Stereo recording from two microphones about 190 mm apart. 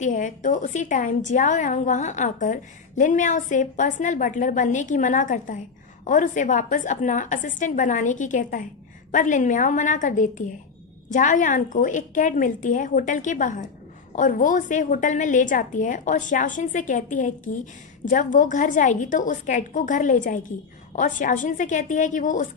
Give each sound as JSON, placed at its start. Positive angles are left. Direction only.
{"t": 0.0, "sound": "a woman's voice", "side_deg": 40}